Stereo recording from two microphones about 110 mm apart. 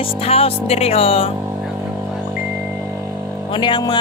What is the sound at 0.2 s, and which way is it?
Speech, 65° left (ahead or behind).